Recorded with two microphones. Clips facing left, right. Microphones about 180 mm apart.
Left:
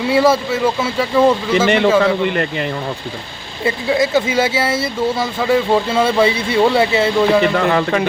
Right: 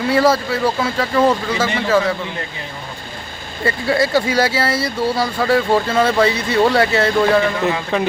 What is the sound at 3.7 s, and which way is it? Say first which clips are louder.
Speech: left 1 dB; 15° left (ahead or behind).